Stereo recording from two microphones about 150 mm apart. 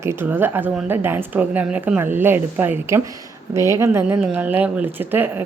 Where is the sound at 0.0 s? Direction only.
15° right (ahead or behind).